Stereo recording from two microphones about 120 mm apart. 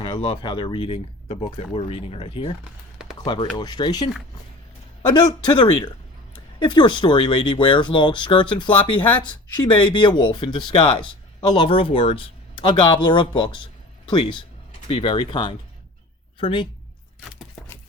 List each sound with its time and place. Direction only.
0.0 s speech: 45° left (ahead or behind)
5.1 s speech: 40° left (ahead or behind)